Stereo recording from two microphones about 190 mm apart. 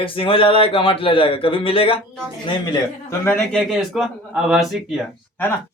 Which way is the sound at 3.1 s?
15° left (ahead or behind).